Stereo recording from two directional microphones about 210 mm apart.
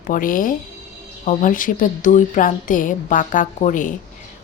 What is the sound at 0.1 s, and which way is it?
Speech, 40° left (ahead or behind).